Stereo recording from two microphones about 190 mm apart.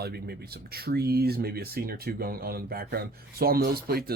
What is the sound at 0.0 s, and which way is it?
Speech, 55° right (ahead or behind).